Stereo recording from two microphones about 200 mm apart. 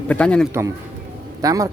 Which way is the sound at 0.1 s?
5° left (ahead or behind).